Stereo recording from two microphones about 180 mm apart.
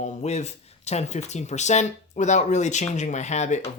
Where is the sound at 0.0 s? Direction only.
40° left (ahead or behind).